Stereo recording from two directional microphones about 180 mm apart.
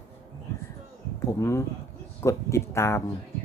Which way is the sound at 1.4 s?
15° left (ahead or behind).